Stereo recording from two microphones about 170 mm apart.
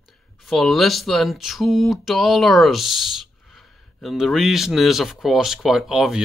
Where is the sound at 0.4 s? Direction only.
Centre (ahead or behind).